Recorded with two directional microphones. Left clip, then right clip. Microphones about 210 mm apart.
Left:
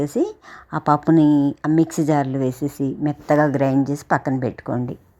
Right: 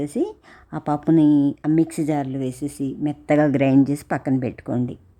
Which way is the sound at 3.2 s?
30° right (ahead or behind).